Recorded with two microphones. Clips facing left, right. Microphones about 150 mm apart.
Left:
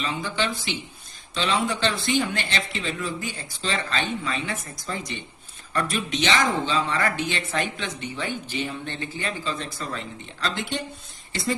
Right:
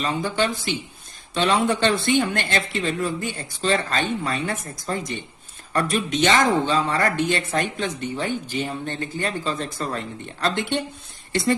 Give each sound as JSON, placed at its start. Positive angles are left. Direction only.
{"t": 0.0, "sound": "speech", "side_deg": -50}